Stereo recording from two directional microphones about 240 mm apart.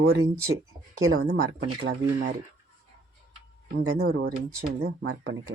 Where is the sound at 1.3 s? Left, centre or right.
Right.